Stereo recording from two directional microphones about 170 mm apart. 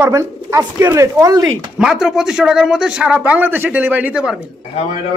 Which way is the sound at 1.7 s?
5° right (ahead or behind).